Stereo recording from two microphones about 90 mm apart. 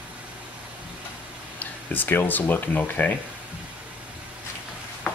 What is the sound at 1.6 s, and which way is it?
Speech, 20° left (ahead or behind).